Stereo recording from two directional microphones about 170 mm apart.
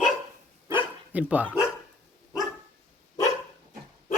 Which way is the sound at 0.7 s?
10° right (ahead or behind).